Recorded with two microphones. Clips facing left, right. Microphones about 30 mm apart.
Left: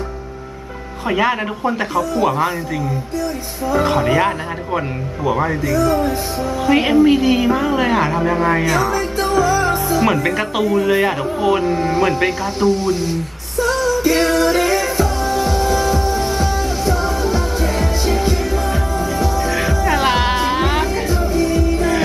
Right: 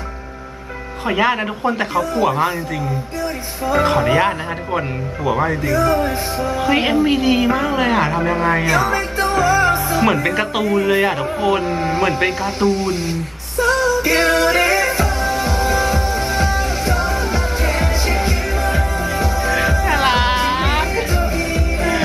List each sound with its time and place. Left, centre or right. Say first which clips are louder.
1.0 s a woman's voice: even; centre
3.8 s a woman's voice: even; centre
5.8 s a woman's voice: left 1 dB; right
9.3 s music: right 1 dB; right
9.9 s a woman's voice: even; centre
13.7 s music: left 2 dB; right